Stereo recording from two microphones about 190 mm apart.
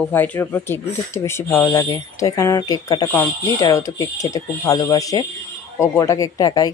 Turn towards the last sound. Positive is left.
turn(degrees=20)  # may be behind; listen again after turning